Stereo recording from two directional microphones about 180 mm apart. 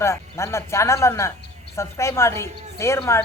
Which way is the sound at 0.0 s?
15° left (ahead or behind).